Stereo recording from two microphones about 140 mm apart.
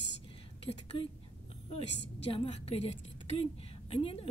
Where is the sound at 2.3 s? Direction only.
45° left (ahead or behind).